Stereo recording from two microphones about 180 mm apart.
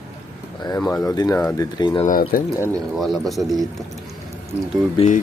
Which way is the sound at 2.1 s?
50° left (ahead or behind).